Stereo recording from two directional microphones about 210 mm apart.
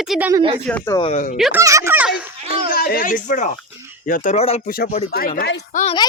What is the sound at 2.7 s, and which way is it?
Speech, 45° left (ahead or behind).